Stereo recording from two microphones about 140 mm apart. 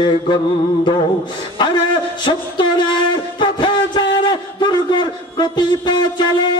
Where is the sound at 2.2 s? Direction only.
35° left (ahead or behind).